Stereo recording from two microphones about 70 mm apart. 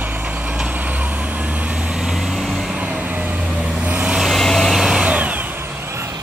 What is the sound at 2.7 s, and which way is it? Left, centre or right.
Vehicle, centre.